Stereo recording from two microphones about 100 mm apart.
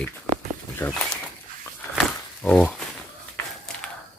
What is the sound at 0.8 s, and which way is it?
Speech, 30° left (ahead or behind).